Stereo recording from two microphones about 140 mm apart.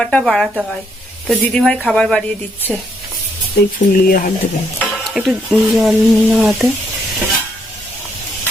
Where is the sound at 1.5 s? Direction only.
5° left (ahead or behind).